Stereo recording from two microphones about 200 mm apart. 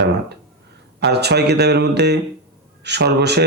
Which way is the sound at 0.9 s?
55° right (ahead or behind).